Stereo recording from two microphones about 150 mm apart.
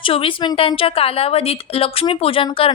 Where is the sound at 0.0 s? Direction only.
35° left (ahead or behind).